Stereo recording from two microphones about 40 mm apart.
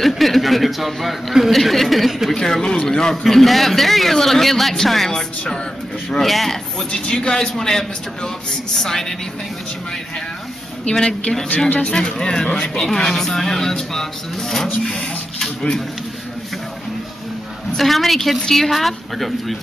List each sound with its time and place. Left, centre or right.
0.0 s a man's voice: centre
2.3 s a man's voice: centre
5.1 s speech: centre
6.2 s a man's voice: centre
6.9 s speech: centre
10.9 s speech: left
17.7 s a man's voice: centre